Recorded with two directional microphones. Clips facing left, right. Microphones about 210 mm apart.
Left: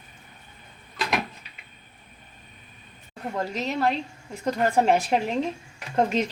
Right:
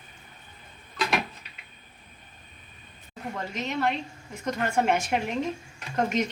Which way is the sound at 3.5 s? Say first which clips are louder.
Left 2 dB; 35° left (ahead or behind).